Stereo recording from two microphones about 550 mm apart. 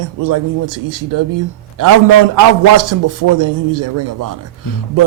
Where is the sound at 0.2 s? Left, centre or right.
Right.